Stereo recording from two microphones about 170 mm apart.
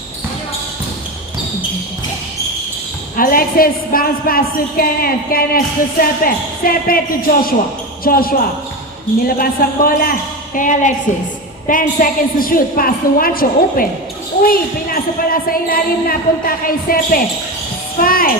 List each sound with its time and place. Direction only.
3.2 s a woman's voice: 55° left (ahead or behind)